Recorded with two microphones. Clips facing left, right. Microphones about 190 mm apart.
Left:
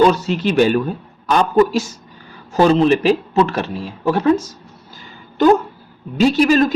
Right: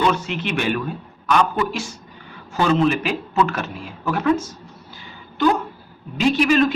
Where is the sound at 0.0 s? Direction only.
35° left (ahead or behind).